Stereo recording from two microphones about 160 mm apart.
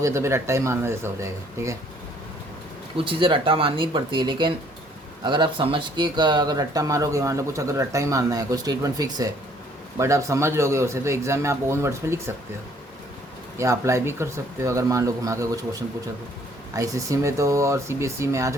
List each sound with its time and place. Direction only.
0.0 s a man's voice: 15° right (ahead or behind)
3.0 s a man's voice: 30° right (ahead or behind); by 12.3 s 15° right (ahead or behind)
13.6 s speech: 15° right (ahead or behind)